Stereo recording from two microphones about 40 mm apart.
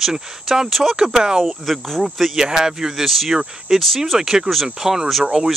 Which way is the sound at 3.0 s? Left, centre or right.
Centre.